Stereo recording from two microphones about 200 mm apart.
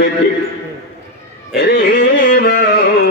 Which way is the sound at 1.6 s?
50° left (ahead or behind).